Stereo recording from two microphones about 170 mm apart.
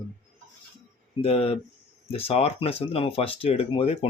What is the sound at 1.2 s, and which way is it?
Speech, 35° left (ahead or behind).